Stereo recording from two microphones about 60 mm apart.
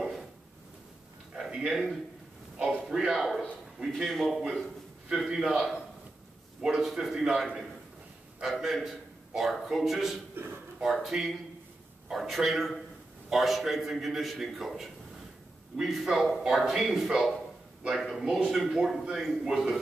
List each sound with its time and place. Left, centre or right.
1.3 s a sound: centre
2.6 s a man's voice: centre
6.6 s a man's voice: centre
10.4 s speech: right
11.1 s a man's voice: centre